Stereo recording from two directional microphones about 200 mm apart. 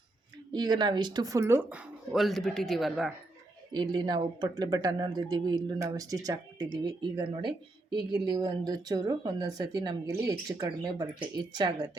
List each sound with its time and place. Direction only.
0.5 s speech: 20° right (ahead or behind); by 3.1 s centre (ahead or behind)
3.7 s speech: 20° right (ahead or behind)